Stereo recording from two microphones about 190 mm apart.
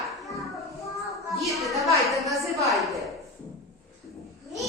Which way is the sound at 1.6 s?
Centre (ahead or behind).